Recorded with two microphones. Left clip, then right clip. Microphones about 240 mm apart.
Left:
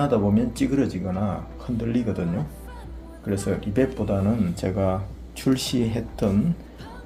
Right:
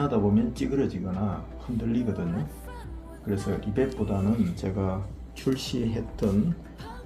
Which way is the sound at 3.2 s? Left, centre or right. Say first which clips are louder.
Left 4 dB; left.